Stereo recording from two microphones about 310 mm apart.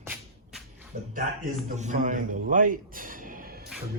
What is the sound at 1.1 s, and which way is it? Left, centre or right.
A man's voice, right.